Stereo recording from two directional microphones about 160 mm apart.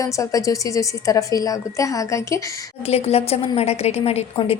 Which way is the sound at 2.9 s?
40° left (ahead or behind).